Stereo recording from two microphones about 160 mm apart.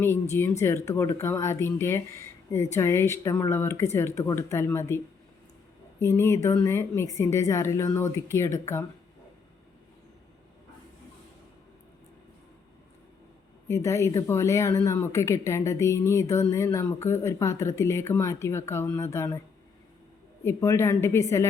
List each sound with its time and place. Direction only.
0.0 s speech: 15° left (ahead or behind)
6.0 s speech: 15° left (ahead or behind)
13.7 s speech: 15° left (ahead or behind)
20.4 s speech: 15° left (ahead or behind)